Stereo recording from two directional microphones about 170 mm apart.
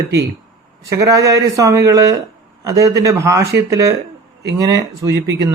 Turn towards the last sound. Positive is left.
turn(degrees=-90)